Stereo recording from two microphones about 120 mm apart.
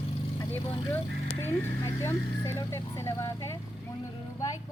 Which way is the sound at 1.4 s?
20° left (ahead or behind).